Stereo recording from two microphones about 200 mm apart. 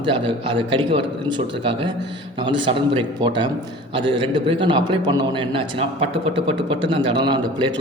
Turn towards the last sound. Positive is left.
turn(degrees=-25)  # may be behind; listen again after turning